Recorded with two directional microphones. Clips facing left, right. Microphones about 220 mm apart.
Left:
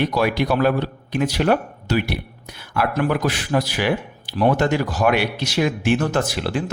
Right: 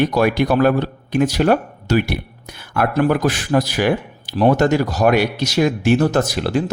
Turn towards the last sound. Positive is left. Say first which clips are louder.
# right 4 dB
turn(degrees=-40)  # may be behind; listen again after turning